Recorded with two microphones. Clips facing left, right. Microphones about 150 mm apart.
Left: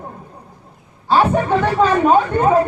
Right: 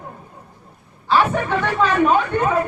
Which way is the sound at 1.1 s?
40° left (ahead or behind).